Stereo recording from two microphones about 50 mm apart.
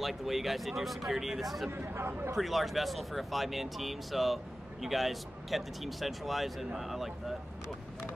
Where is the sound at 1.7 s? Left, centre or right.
Right.